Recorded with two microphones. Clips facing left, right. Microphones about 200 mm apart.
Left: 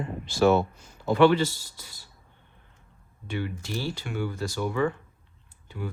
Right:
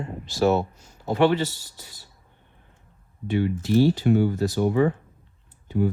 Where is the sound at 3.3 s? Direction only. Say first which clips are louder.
Right 12 dB; 40° right (ahead or behind).